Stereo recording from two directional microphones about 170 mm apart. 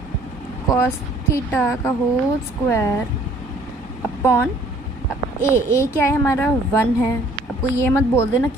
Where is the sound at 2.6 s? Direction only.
15° left (ahead or behind).